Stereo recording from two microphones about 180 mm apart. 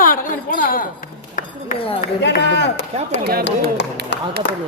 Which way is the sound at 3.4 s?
75° left (ahead or behind).